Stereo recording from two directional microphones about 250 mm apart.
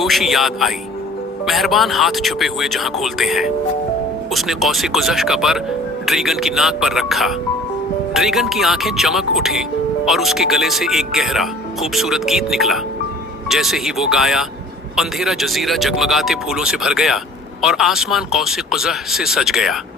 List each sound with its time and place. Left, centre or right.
0.0 s speech: centre